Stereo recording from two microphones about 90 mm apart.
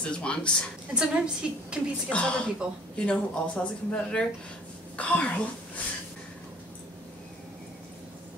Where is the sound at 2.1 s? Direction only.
10° left (ahead or behind).